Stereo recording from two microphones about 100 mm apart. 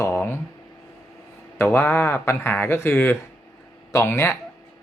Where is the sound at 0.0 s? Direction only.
25° left (ahead or behind).